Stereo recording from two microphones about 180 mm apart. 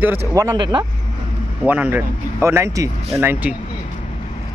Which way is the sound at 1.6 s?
10° right (ahead or behind).